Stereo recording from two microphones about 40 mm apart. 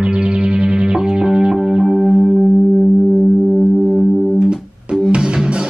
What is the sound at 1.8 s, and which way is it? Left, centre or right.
Music, centre.